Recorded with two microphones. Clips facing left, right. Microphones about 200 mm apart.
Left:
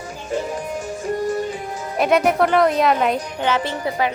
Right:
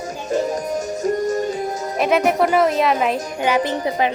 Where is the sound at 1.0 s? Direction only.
40° right (ahead or behind).